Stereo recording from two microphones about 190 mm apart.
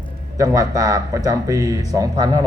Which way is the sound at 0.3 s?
15° right (ahead or behind).